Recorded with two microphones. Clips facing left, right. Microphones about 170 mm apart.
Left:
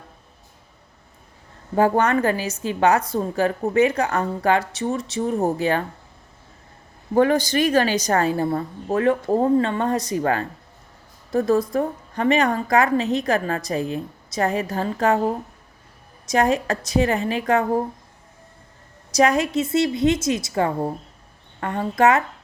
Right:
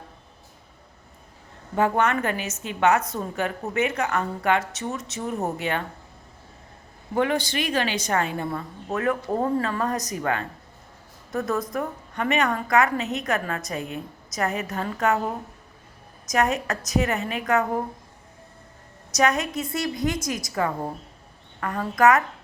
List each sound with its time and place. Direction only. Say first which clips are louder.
1.7 s a woman's voice: left 4 dB; 35° left (ahead or behind)
7.1 s a woman's voice: left 6 dB; 40° left (ahead or behind)
16.2 s a woman's voice: left 4 dB; 30° left (ahead or behind)
19.1 s a woman's voice: left 5 dB; 30° left (ahead or behind)